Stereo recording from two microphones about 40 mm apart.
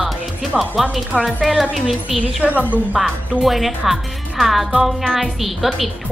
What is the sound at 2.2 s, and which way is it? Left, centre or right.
Speech, right.